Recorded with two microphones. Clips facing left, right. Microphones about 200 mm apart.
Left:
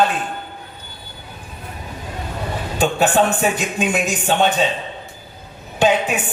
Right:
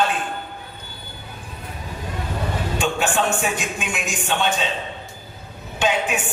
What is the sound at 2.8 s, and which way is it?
Speech, 40° left (ahead or behind).